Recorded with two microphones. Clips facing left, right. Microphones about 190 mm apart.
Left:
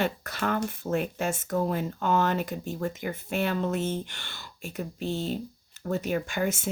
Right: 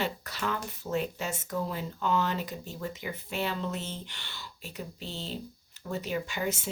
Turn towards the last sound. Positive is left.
turn(degrees=50)  # may be behind; listen again after turning